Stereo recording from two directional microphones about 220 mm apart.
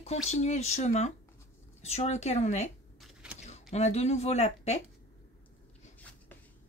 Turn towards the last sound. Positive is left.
turn(degrees=30)  # may be behind; listen again after turning